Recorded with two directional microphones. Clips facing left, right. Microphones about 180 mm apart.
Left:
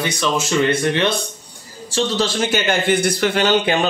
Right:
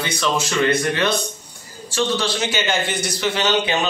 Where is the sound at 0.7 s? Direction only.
30° left (ahead or behind).